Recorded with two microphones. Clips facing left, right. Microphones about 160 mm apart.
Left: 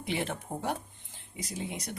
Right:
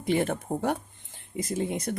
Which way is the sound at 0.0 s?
45° right (ahead or behind).